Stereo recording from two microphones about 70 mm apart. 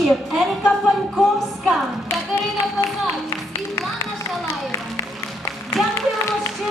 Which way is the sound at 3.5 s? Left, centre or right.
Left.